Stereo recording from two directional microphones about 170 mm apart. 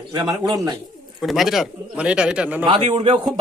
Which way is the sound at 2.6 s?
30° right (ahead or behind).